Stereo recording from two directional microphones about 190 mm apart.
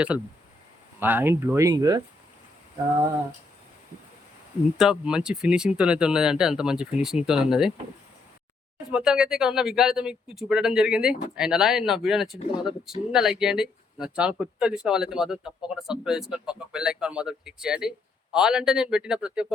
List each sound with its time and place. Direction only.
0.9 s speech: 10° right (ahead or behind)
4.8 s speech: 5° right (ahead or behind)
8.9 s speech: 5° right (ahead or behind)